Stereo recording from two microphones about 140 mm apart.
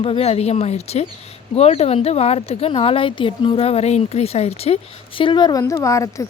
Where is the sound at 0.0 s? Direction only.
45° left (ahead or behind).